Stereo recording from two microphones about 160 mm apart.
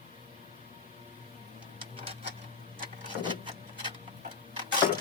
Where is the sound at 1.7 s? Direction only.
35° right (ahead or behind).